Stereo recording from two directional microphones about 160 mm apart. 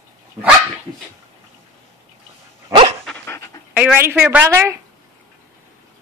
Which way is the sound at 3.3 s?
20° left (ahead or behind).